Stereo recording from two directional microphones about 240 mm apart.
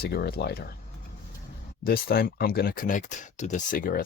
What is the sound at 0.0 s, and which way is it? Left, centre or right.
Speech, left.